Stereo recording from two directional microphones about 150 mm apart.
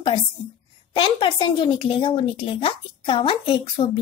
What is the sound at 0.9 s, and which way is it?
A woman's voice, 35° left (ahead or behind).